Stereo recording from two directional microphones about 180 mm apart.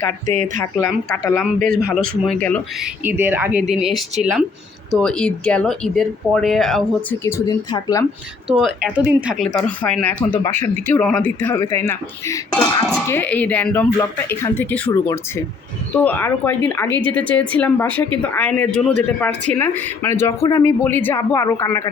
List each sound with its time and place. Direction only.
0.3 s speech: 45° right (ahead or behind)
1.1 s speech: 10° left (ahead or behind)
2.8 s speech: 10° right (ahead or behind)
7.3 s speech: 20° left (ahead or behind)
8.4 s a woman's voice: centre (ahead or behind); by 21.8 s 15° left (ahead or behind)